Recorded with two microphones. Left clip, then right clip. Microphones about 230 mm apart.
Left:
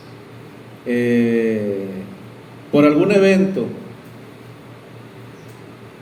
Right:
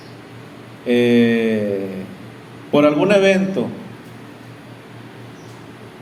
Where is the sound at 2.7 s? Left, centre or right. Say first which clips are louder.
Even; right.